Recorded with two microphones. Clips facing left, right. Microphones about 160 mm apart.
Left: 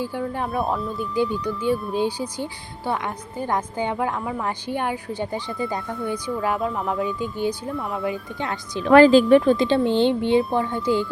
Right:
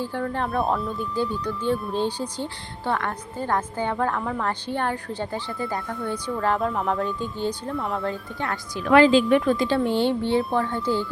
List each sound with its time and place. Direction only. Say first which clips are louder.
0.0 s speech: even; 10° left (ahead or behind)
1.1 s a woman's voice: left 5 dB; 15° left (ahead or behind); by 8.0 s centre (ahead or behind)
8.0 s speech: left 2 dB; 20° left (ahead or behind)
8.9 s speech: left 4 dB; 40° left (ahead or behind)
9.4 s speech: left 3 dB; 25° left (ahead or behind)